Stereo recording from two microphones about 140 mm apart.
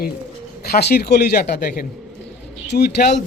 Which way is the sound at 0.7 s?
90° left.